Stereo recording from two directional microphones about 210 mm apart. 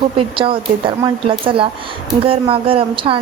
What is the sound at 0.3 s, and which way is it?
A woman's voice, 25° right (ahead or behind).